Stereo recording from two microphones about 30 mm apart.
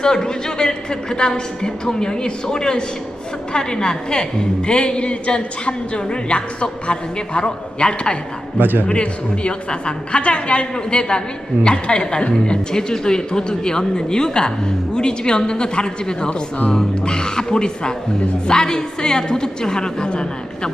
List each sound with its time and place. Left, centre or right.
0.0 s a woman's voice: left
8.5 s a man's voice: right
8.9 s a woman's voice: left
12.7 s a woman's voice: left